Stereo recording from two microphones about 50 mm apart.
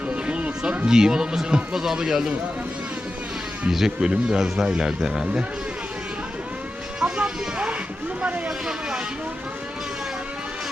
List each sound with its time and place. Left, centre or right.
0.1 s music: right
1.7 s speech: centre
3.7 s speech: centre
7.0 s a sound: right
8.4 s speech: centre